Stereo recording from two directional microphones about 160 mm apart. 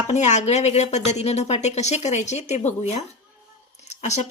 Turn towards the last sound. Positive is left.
turn(degrees=45)  # may be behind; listen again after turning